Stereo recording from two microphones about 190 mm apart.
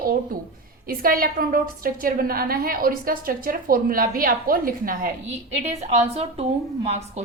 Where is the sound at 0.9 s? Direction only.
50° right (ahead or behind).